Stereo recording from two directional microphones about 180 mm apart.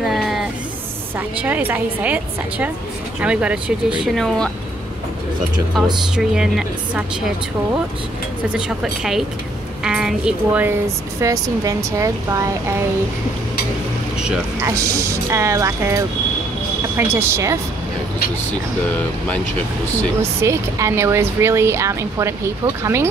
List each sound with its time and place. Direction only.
0.0 s music: centre (ahead or behind)
1.1 s speech: 10° right (ahead or behind)
5.7 s speech: centre (ahead or behind)
8.5 s speech: 5° right (ahead or behind)
14.6 s speech: 15° right (ahead or behind)
18.9 s speech: 10° left (ahead or behind)
20.2 s speech: 15° right (ahead or behind)